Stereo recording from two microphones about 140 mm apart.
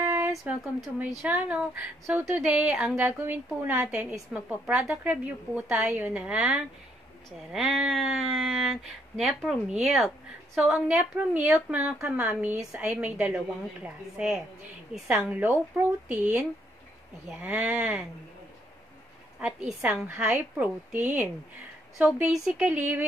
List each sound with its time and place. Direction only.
0.0 s a sound: 15° right (ahead or behind)
0.3 s a woman's voice: centre (ahead or behind)
11.0 s a woman's voice: 20° right (ahead or behind)
17.3 s a woman's voice: 10° right (ahead or behind)
19.4 s a woman's voice: 10° right (ahead or behind)